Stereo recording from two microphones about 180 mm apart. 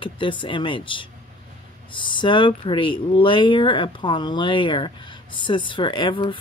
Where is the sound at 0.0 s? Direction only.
25° left (ahead or behind).